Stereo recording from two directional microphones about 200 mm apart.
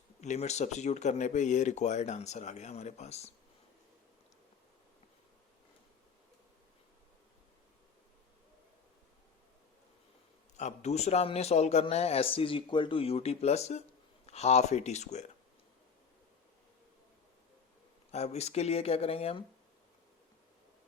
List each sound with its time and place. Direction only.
0.2 s speech: 35° left (ahead or behind)
10.6 s speech: 35° left (ahead or behind)
18.1 s speech: 35° left (ahead or behind)